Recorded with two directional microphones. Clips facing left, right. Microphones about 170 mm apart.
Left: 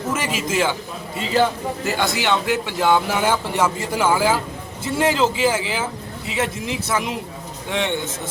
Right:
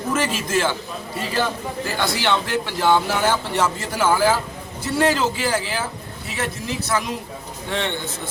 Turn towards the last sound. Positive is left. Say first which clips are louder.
# left 1 dB
turn(degrees=15)  # may be behind; listen again after turning